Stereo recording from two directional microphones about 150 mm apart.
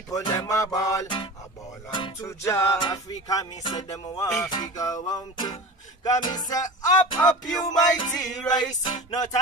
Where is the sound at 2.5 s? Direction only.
20° left (ahead or behind).